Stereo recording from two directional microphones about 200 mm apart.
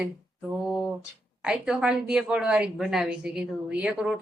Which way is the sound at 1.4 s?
5° right (ahead or behind).